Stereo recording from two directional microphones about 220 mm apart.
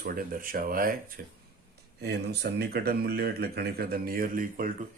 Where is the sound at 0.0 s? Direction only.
40° right (ahead or behind).